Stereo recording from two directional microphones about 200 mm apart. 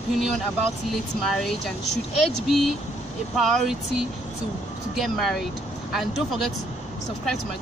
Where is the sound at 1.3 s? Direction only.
Centre (ahead or behind).